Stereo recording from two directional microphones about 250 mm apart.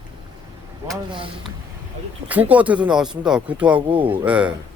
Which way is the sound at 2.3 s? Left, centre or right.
Centre.